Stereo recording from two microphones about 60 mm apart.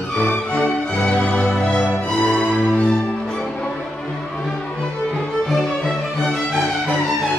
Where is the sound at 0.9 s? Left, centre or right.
Centre.